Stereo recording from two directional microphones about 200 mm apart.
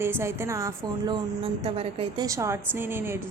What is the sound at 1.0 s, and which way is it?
Speech, 25° right (ahead or behind).